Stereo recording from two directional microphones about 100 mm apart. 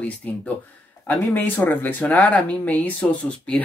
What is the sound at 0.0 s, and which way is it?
Speech, 15° left (ahead or behind).